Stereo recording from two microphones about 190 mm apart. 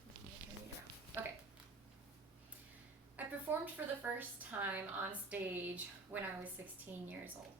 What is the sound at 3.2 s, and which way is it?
Speech, 10° right (ahead or behind).